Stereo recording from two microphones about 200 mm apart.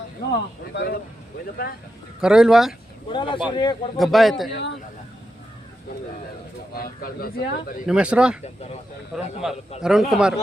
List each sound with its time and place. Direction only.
0.3 s speech: 60° left (ahead or behind)
2.2 s a man's voice: 5° right (ahead or behind)
3.1 s speech: 25° left (ahead or behind)
3.9 s a man's voice: centre (ahead or behind)
4.4 s speech: 60° left (ahead or behind)
6.7 s speech: 50° left (ahead or behind)
7.9 s a man's voice: 5° right (ahead or behind)